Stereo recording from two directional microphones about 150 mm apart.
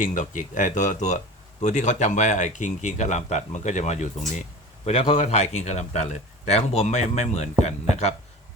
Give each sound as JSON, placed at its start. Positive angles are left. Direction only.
{"t": 0.0, "sound": "a man's voice", "side_deg": 60}